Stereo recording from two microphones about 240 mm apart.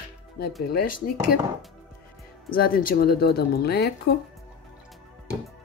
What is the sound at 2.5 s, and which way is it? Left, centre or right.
Speech, left.